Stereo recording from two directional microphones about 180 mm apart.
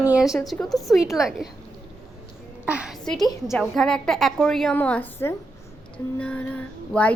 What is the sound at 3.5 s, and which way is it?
A woman's voice, 5° left (ahead or behind).